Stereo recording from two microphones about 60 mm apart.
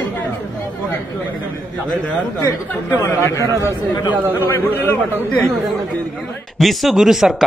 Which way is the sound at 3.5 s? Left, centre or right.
Right.